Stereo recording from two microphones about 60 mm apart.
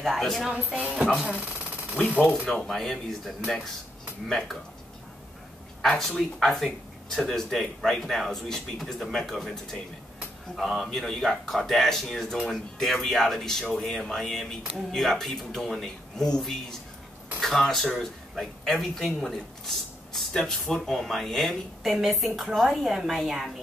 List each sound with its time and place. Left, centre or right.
0.0 s speech: centre
0.6 s speech: right
2.4 s speech: centre
5.8 s a man's voice: centre